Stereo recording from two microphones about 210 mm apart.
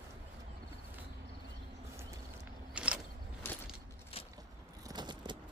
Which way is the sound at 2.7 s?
5° right (ahead or behind).